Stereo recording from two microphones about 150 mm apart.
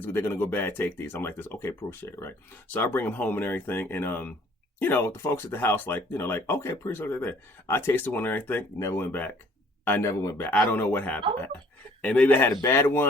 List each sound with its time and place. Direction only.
0.0 s speech: 15° left (ahead or behind)